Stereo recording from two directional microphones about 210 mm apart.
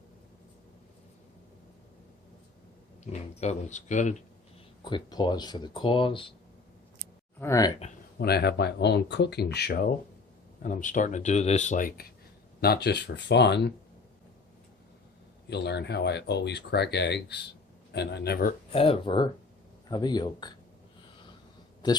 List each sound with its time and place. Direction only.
3.0 s speech: 35° left (ahead or behind)
4.8 s speech: 20° left (ahead or behind)
7.3 s speech: 15° left (ahead or behind)
8.2 s speech: 50° left (ahead or behind)
15.4 s speech: 55° left (ahead or behind)
18.7 s speech: 25° left (ahead or behind)